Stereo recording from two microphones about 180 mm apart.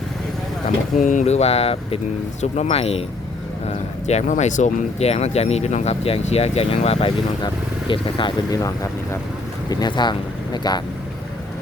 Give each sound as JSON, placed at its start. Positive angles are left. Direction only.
{"t": 0.9, "sound": "speech", "side_deg": 45}
{"t": 4.0, "sound": "speech", "side_deg": 40}